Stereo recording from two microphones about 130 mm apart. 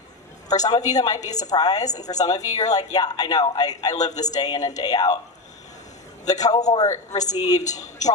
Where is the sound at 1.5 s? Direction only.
30° left (ahead or behind).